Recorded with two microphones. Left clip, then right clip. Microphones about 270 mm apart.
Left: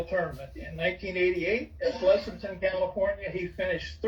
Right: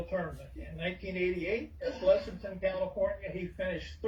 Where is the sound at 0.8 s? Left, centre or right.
Left.